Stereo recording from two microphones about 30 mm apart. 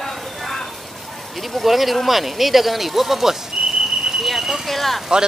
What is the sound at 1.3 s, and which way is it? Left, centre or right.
A man's voice, centre.